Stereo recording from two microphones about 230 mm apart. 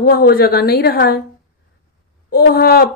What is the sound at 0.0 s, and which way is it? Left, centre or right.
Speech, left.